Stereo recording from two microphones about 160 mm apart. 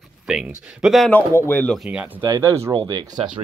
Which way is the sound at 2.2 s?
20° right (ahead or behind).